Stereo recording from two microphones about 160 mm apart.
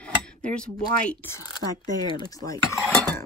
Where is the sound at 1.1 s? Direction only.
15° left (ahead or behind).